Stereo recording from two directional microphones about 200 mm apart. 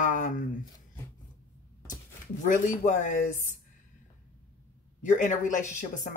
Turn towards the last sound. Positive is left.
turn(degrees=40)  # may be behind; listen again after turning